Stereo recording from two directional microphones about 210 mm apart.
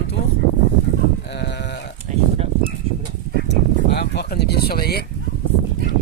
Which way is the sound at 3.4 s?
55° left (ahead or behind).